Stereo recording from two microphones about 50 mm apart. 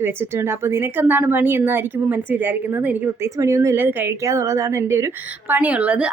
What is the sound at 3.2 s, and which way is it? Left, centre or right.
Speech, right.